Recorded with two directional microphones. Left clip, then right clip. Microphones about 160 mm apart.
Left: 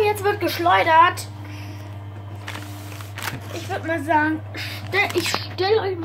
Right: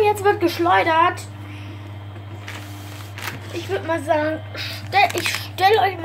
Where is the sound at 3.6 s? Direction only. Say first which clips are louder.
Right 2 dB; 25° right (ahead or behind).